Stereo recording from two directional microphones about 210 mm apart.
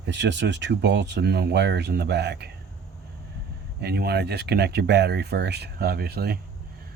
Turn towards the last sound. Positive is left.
turn(degrees=-45)  # may be behind; listen again after turning